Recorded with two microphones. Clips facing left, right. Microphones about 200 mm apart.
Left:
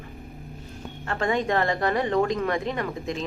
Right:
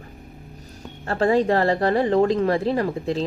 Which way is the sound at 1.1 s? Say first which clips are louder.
Right 6 dB; 30° right (ahead or behind).